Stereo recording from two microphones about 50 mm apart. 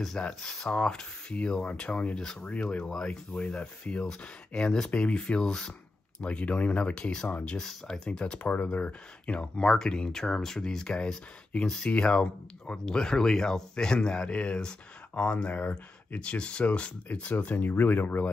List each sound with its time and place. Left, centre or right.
0.3 s speech: centre
6.2 s speech: left
7.5 s speech: centre
8.4 s speech: left
17.4 s speech: left